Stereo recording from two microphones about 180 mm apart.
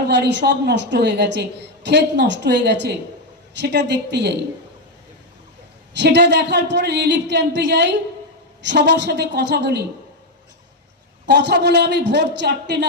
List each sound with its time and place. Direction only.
0.1 s a woman's voice: 75° right (ahead or behind)
6.0 s a woman's voice: 70° right (ahead or behind)
11.3 s a woman's voice: 70° right (ahead or behind)